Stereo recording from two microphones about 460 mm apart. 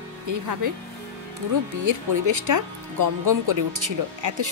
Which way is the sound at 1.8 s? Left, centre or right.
Right.